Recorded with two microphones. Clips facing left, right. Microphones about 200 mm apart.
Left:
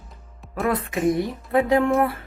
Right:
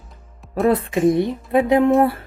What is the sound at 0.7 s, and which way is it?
Speech, 30° right (ahead or behind).